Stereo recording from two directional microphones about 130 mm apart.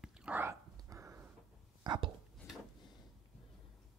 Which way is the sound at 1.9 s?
35° right (ahead or behind).